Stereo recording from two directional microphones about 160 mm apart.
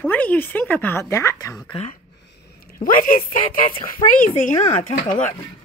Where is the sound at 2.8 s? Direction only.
60° left (ahead or behind).